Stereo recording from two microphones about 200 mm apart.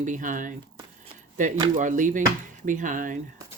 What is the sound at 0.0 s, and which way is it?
Speech, 40° right (ahead or behind).